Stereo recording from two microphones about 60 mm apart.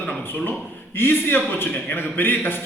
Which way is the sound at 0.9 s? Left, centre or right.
Left.